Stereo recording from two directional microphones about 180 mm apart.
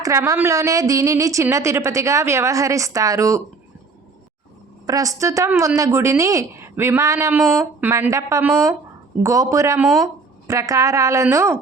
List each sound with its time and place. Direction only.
0.0 s a woman's voice: 15° right (ahead or behind)
4.9 s a woman's voice: 20° right (ahead or behind)
7.3 s speech: centre (ahead or behind)
7.9 s a woman's voice: 15° right (ahead or behind)